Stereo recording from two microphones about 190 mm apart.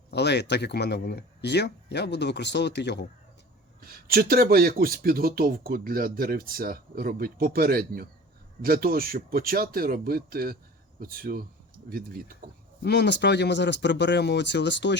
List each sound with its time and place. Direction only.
0.1 s speech: 65° left (ahead or behind)
3.8 s speech: 50° right (ahead or behind)
12.8 s speech: 65° left (ahead or behind)